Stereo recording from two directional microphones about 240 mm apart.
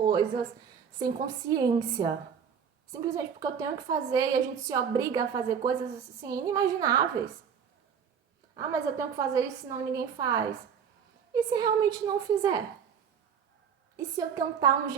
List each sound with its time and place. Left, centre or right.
0.9 s a woman's voice: centre
8.5 s a woman's voice: centre
13.9 s a woman's voice: centre